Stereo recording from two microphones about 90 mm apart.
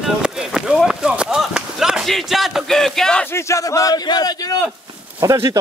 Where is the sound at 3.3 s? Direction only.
30° left (ahead or behind).